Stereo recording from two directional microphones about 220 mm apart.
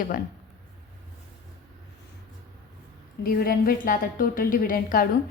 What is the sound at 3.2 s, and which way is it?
A woman's voice, 40° left (ahead or behind).